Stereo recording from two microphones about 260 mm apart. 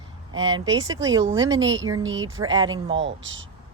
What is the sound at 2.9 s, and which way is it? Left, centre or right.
Speech, right.